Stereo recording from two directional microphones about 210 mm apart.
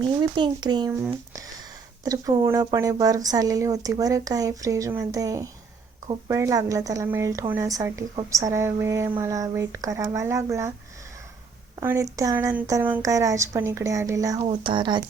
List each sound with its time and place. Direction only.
0.2 s speech: 20° right (ahead or behind)
2.0 s a woman's voice: 15° right (ahead or behind)
11.8 s a woman's voice: 15° right (ahead or behind)